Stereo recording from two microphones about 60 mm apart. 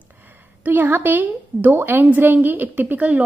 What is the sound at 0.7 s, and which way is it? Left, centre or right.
A woman's voice, right.